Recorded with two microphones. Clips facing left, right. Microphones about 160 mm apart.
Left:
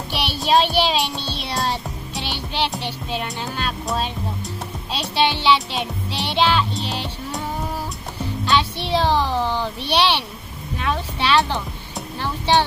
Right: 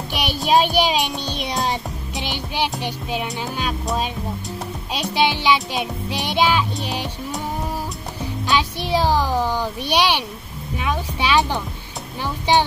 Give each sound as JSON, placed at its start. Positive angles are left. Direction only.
{"t": 0.1, "sound": "child singing", "side_deg": -15}
{"t": 0.5, "sound": "music", "side_deg": -15}
{"t": 3.3, "sound": "a child's voice", "side_deg": -10}
{"t": 5.1, "sound": "a child's voice", "side_deg": -10}
{"t": 8.5, "sound": "a child's voice", "side_deg": -10}